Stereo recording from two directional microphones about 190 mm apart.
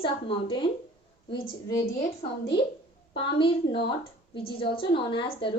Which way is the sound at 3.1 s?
25° left (ahead or behind).